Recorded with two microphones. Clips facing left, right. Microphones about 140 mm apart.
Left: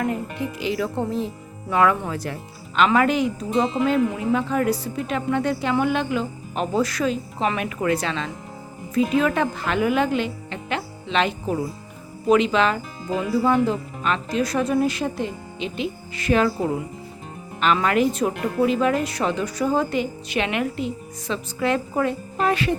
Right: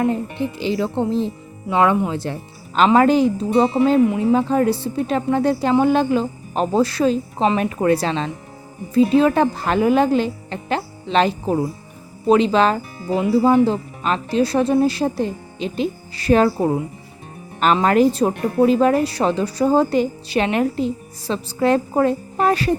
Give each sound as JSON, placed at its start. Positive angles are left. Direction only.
{"t": 0.0, "sound": "a woman's voice", "side_deg": -30}
{"t": 17.8, "sound": "a woman's voice", "side_deg": -35}